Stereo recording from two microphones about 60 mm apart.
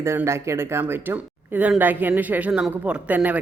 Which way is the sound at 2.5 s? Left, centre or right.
Centre.